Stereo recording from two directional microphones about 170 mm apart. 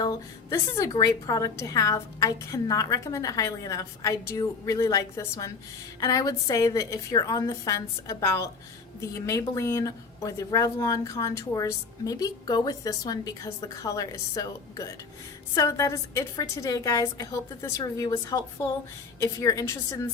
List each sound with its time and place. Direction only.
0.5 s a woman's voice: 20° left (ahead or behind)